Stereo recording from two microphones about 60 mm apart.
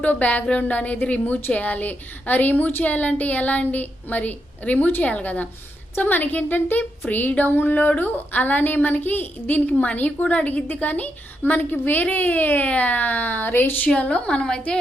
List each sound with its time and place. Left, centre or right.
0.0 s speech: left
13.8 s speech: left